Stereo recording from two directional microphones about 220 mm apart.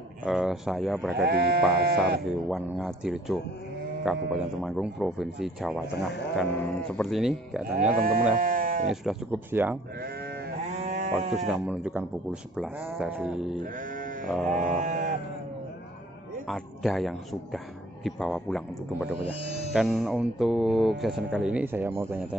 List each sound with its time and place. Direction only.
0.2 s speech: centre (ahead or behind)
1.2 s speech: 45° right (ahead or behind)
2.2 s speech: centre (ahead or behind)
7.7 s speech: 40° right (ahead or behind)
8.8 s speech: 5° right (ahead or behind)
10.0 s sheep: 45° right (ahead or behind)
10.8 s sheep: 35° right (ahead or behind)
11.4 s speech: 5° right (ahead or behind)
13.7 s sheep: 40° right (ahead or behind)
14.2 s speech: 5° left (ahead or behind)
14.8 s sheep: 35° right (ahead or behind)
16.4 s speech: centre (ahead or behind)